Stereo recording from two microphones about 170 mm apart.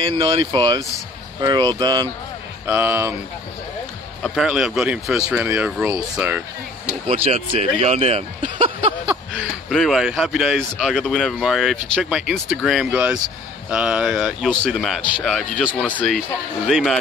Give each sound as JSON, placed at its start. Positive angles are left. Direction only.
{"t": 0.2, "sound": "speech", "side_deg": -25}
{"t": 2.6, "sound": "speech", "side_deg": -10}
{"t": 4.2, "sound": "a man's voice", "side_deg": -5}
{"t": 7.1, "sound": "speech", "side_deg": -40}
{"t": 9.3, "sound": "a man's voice", "side_deg": 0}